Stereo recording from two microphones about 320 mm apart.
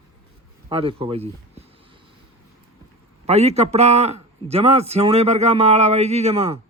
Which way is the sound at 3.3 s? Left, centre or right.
Centre.